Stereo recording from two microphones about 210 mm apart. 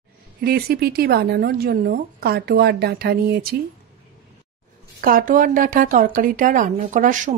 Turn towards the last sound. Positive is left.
turn(degrees=-35)  # may be behind; listen again after turning